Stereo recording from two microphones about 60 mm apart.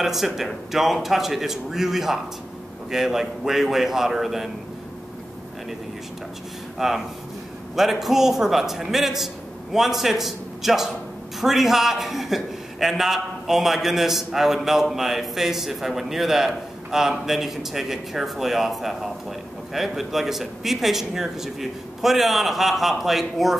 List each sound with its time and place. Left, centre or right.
0.0 s a man's voice: centre
6.8 s a man's voice: centre